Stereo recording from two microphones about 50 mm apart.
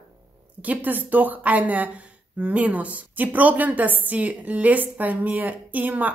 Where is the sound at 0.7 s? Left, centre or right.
Right.